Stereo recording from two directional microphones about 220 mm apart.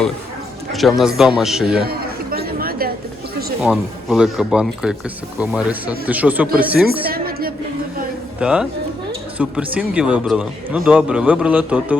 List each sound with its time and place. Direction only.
0.7 s a man's voice: centre (ahead or behind)
1.8 s chatter: 45° right (ahead or behind)
3.6 s a man's voice: 5° right (ahead or behind)
7.1 s music: 45° right (ahead or behind)
8.4 s a man's voice: 5° right (ahead or behind)